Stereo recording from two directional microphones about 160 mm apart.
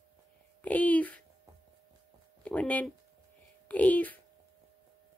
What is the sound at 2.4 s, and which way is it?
Speech, 10° left (ahead or behind).